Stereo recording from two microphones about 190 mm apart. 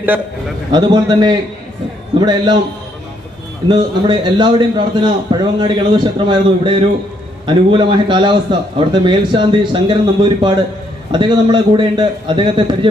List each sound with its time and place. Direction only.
0.7 s a man's voice: 25° right (ahead or behind)
3.7 s a man's voice: 25° right (ahead or behind)
11.1 s a man's voice: 25° right (ahead or behind)